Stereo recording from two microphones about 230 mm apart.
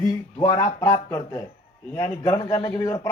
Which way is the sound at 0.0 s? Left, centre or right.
Centre.